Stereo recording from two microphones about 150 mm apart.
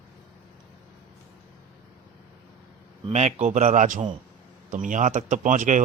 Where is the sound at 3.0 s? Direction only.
50° right (ahead or behind).